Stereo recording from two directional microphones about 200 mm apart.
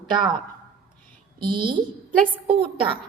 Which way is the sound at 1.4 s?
25° right (ahead or behind).